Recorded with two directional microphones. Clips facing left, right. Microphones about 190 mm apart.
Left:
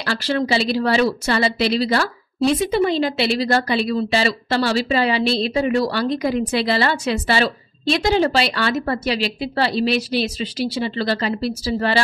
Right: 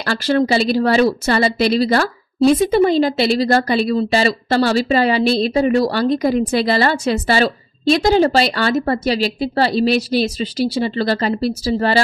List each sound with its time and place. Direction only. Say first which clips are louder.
0.0 s speech: right 5 dB; 45° right (ahead or behind)